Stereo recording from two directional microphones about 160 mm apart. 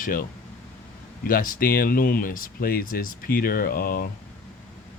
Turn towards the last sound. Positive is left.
turn(degrees=65)  # may be behind; listen again after turning